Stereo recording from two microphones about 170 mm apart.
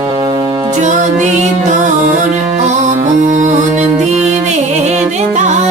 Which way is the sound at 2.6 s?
45° right (ahead or behind).